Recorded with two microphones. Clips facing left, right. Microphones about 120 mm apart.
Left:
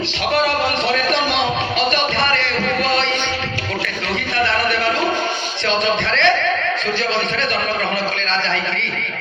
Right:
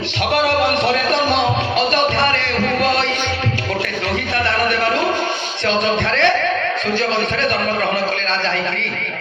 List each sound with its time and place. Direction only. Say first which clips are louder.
5.6 s speech: right 1 dB; 50° right (ahead or behind)